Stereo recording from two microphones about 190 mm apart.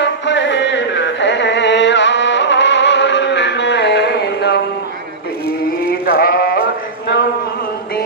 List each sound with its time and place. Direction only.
0.0 s music: 70° left (ahead or behind)
5.9 s sheep: 50° left (ahead or behind)